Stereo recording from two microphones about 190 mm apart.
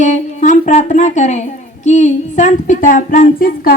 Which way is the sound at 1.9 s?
40° left (ahead or behind).